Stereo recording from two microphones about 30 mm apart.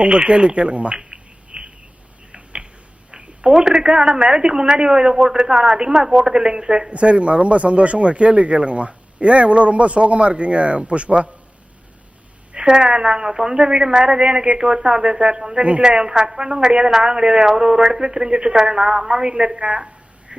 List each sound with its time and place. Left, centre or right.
0.0 s speech: right
0.9 s a sound: right
3.5 s speech: right
6.9 s speech: right
12.6 s speech: right
19.5 s a sound: right